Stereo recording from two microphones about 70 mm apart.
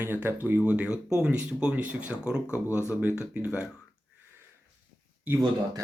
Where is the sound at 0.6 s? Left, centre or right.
Centre.